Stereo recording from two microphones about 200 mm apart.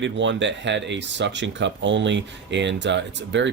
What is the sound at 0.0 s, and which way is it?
Speech, 65° right (ahead or behind).